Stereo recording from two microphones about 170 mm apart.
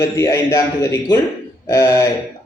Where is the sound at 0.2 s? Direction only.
20° left (ahead or behind).